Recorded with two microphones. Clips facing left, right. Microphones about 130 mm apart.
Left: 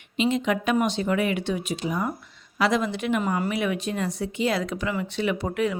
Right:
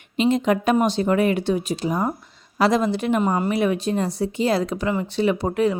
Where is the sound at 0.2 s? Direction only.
40° right (ahead or behind).